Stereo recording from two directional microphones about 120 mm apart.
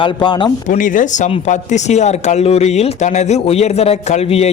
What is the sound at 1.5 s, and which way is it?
A man's voice, 75° left (ahead or behind).